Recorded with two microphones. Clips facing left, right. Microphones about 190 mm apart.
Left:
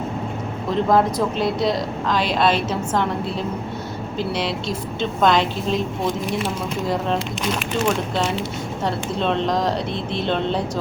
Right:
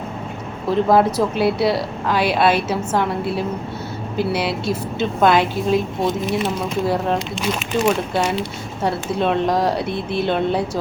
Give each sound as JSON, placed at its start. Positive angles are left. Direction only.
{"t": 0.9, "sound": "a woman's voice", "side_deg": -5}
{"t": 7.9, "sound": "a woman's voice", "side_deg": -10}